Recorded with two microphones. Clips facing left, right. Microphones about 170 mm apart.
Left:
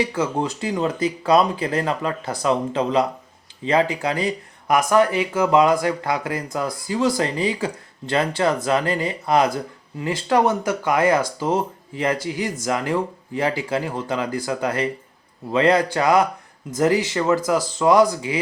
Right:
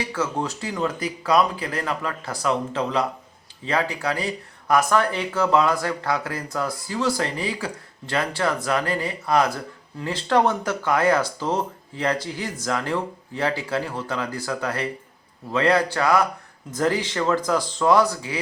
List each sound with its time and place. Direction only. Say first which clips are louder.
0.1 s speech: left 3 dB; 15° left (ahead or behind)
10.0 s speech: left 2 dB; 10° left (ahead or behind)